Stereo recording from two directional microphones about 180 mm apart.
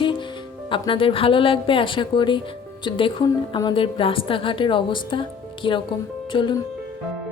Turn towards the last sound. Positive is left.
turn(degrees=25)  # may be behind; listen again after turning